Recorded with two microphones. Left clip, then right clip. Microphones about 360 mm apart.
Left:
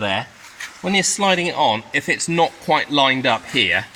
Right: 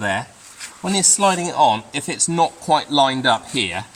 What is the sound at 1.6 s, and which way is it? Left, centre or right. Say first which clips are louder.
Speech: right 2 dB; centre.